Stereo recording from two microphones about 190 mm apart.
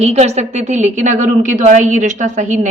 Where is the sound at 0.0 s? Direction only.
35° right (ahead or behind).